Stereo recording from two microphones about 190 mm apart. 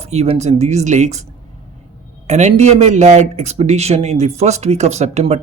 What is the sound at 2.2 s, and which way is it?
A man's voice, 35° right (ahead or behind).